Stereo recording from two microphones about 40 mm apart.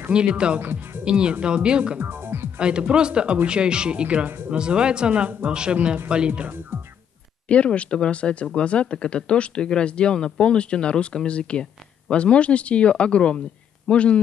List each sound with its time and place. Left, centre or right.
0.1 s speech: right
0.6 s speech: right
1.0 s speech: right
2.0 s music: right
2.8 s speech: right
7.4 s speech: left